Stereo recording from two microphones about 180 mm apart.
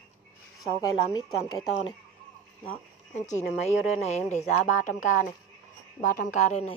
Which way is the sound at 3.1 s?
40° left (ahead or behind).